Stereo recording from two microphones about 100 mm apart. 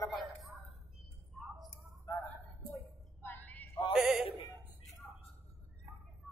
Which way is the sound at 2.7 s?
20° left (ahead or behind).